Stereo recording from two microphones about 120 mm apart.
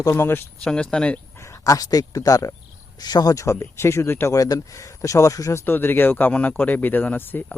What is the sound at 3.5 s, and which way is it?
Speech, 20° left (ahead or behind).